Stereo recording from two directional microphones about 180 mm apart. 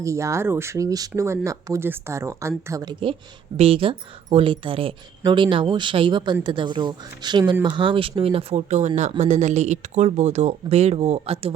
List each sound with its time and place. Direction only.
0.0 s speech: 15° right (ahead or behind)
3.6 s speech: 30° right (ahead or behind)